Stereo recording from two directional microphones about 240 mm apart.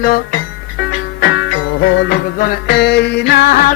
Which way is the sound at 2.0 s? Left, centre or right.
Left.